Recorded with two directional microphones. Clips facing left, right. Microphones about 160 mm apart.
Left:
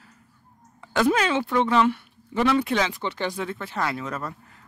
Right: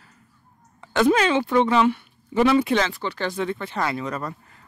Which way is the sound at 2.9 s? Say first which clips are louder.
Right 1 dB; 20° left (ahead or behind).